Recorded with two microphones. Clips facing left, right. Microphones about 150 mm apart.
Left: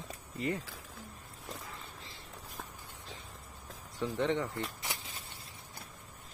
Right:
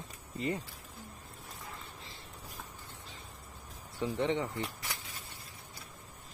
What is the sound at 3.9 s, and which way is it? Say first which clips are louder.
Speech: even; 15° right (ahead or behind).